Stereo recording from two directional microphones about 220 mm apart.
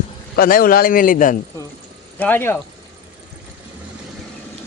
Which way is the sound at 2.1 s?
10° left (ahead or behind).